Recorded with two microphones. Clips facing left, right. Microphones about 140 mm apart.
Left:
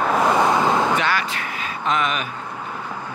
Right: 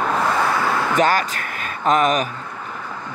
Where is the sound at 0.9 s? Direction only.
45° right (ahead or behind).